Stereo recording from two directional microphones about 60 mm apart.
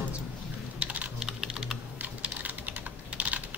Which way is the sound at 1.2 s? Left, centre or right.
Centre.